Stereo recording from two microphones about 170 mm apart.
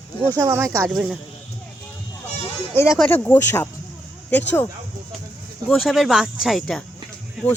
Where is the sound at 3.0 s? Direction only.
10° left (ahead or behind).